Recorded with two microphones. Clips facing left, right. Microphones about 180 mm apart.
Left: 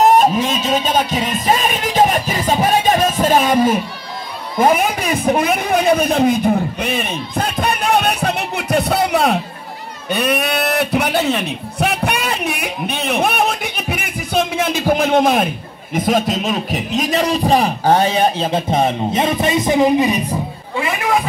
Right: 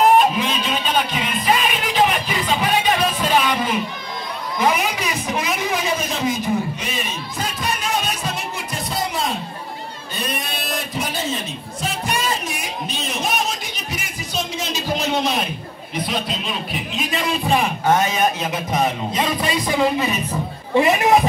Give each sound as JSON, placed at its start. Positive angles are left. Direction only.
{"t": 0.0, "sound": "music", "side_deg": 45}
{"t": 4.6, "sound": "a sound", "side_deg": 50}
{"t": 20.7, "sound": "speech", "side_deg": -20}